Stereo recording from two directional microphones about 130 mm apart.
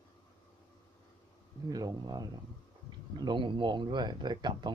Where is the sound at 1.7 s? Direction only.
30° right (ahead or behind).